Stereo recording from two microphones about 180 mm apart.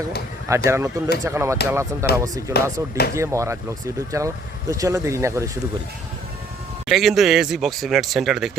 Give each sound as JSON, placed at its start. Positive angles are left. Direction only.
{"t": 0.4, "sound": "speech", "side_deg": -15}
{"t": 6.8, "sound": "speech", "side_deg": 0}